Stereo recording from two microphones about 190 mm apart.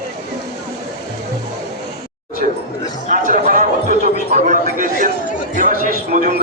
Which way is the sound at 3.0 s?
45° right (ahead or behind).